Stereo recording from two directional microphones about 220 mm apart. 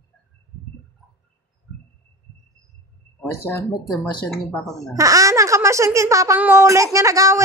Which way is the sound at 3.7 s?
20° left (ahead or behind).